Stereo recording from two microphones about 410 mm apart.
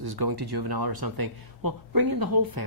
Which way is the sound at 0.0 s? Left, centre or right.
Right.